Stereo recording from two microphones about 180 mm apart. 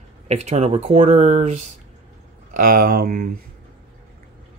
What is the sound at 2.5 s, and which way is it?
Speech, 55° right (ahead or behind).